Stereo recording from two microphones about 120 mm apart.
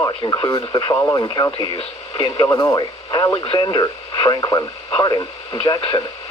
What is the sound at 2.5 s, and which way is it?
Speech, 30° left (ahead or behind).